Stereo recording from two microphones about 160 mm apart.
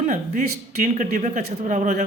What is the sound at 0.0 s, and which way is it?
Speech, 50° right (ahead or behind).